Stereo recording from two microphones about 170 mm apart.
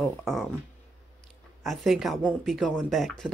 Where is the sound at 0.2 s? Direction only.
Centre (ahead or behind).